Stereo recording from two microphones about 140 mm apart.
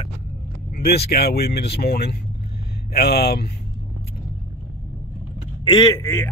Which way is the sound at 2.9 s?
90° left.